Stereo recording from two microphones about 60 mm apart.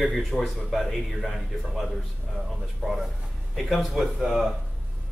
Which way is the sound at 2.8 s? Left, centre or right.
Centre.